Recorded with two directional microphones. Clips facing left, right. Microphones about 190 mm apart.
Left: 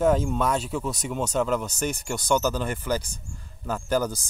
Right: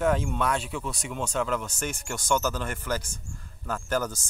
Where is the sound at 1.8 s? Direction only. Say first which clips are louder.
Left 5 dB; 40° left (ahead or behind).